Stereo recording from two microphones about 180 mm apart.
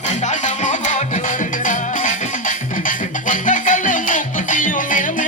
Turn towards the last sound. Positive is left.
turn(degrees=45)  # may be behind; listen again after turning